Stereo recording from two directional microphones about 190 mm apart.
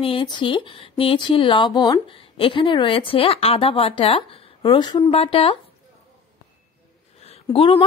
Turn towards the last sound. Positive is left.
turn(degrees=30)  # may be behind; listen again after turning